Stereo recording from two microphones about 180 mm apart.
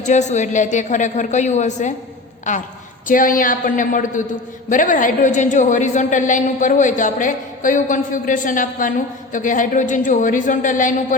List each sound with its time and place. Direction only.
0.0 s a woman's voice: 40° left (ahead or behind)